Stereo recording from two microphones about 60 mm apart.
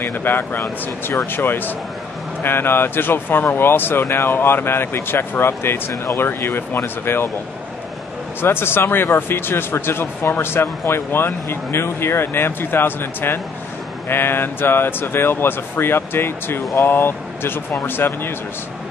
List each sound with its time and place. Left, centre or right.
0.0 s speech: left
8.4 s speech: left